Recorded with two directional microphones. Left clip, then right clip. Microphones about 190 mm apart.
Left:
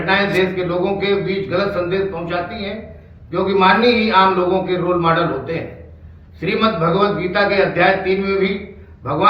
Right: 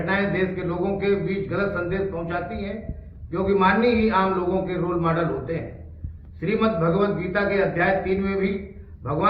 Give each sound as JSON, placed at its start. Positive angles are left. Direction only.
{"t": 0.0, "sound": "a man's voice", "side_deg": 15}